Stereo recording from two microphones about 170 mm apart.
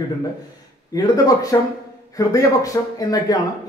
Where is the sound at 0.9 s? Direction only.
20° left (ahead or behind).